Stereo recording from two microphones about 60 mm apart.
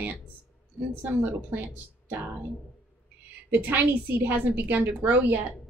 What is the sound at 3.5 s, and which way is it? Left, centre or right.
A woman's voice, right.